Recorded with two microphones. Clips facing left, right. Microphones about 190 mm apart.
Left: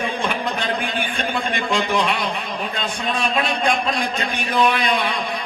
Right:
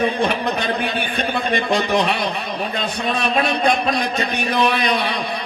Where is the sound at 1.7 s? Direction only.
40° right (ahead or behind).